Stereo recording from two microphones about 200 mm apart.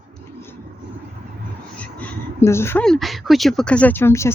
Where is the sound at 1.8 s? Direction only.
5° left (ahead or behind).